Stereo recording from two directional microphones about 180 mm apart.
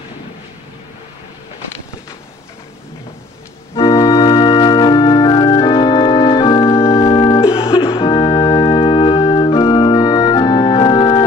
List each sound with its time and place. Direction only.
3.7 s organ: 20° left (ahead or behind)